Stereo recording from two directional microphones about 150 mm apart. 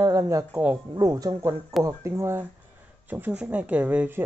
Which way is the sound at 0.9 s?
25° right (ahead or behind).